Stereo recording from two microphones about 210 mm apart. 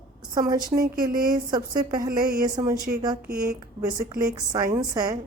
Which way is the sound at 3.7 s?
15° right (ahead or behind).